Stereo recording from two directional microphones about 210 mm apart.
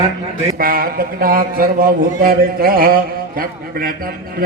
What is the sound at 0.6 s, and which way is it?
Music, 45° right (ahead or behind).